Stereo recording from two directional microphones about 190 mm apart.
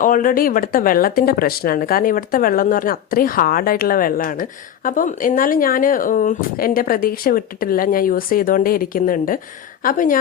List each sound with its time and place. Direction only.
0.0 s speech: 45° left (ahead or behind)